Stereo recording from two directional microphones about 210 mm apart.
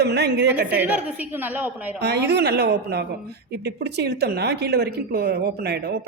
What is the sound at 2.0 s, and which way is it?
A woman's voice, 55° right (ahead or behind).